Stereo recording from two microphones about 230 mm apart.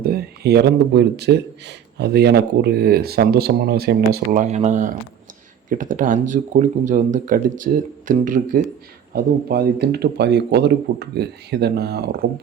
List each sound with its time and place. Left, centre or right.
0.0 s speech: right